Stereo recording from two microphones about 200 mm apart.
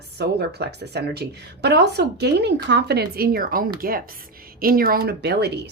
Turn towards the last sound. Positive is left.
turn(degrees=-55)  # may be behind; listen again after turning